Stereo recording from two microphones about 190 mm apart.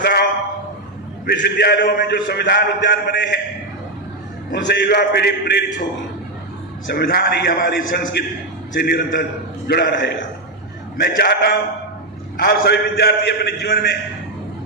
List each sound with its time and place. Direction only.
0.0 s a man's voice: 55° left (ahead or behind)
4.5 s a man's voice: 60° left (ahead or behind)
6.9 s a man's voice: 55° left (ahead or behind)